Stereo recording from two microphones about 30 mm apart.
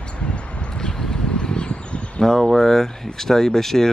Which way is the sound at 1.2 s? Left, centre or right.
Left.